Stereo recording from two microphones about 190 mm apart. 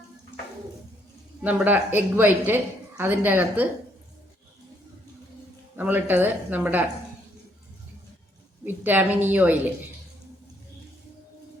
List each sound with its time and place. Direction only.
1.4 s a woman's voice: 5° right (ahead or behind)
5.7 s a woman's voice: 10° right (ahead or behind)
8.6 s a woman's voice: 10° right (ahead or behind)